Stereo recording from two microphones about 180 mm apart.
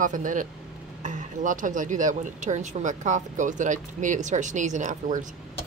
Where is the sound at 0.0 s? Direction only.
45° right (ahead or behind).